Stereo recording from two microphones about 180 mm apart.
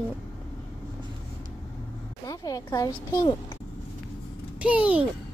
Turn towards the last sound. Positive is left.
turn(degrees=-10)  # may be behind; listen again after turning